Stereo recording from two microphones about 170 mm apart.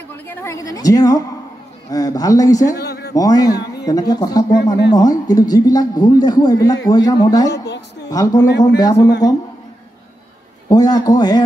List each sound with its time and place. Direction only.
0.3 s a man's voice: 15° left (ahead or behind)
2.8 s a sound: 70° left (ahead or behind)
3.2 s a man's voice: 20° left (ahead or behind)
7.5 s a woman's voice: 90° left
8.1 s a man's voice: 20° left (ahead or behind)
10.7 s a man's voice: 20° left (ahead or behind)